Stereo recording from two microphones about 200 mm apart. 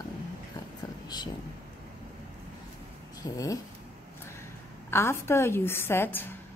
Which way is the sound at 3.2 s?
15° left (ahead or behind).